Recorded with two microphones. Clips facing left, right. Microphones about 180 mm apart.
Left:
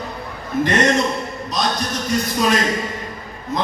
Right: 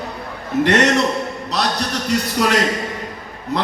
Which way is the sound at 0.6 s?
70° right (ahead or behind).